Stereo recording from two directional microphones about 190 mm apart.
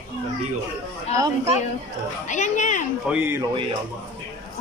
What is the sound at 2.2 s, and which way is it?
Speech, 40° left (ahead or behind).